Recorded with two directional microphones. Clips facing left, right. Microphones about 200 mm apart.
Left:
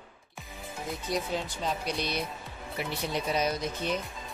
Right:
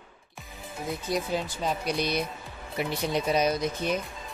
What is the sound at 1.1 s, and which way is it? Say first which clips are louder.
Speech: right 2 dB; 5° right (ahead or behind).